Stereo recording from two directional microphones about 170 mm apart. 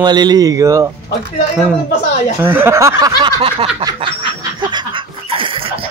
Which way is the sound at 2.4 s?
15° right (ahead or behind).